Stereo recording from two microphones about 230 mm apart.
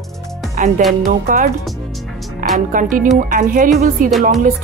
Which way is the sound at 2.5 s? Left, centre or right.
Right.